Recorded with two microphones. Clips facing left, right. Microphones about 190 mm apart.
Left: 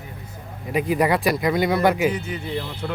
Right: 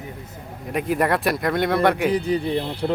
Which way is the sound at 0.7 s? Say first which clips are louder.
Left 1 dB; centre (ahead or behind).